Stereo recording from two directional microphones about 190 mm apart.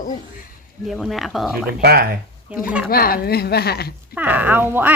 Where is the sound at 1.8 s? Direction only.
55° right (ahead or behind).